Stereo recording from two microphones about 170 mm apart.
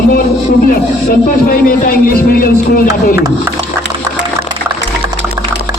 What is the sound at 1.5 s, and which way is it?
Speech, 60° left (ahead or behind).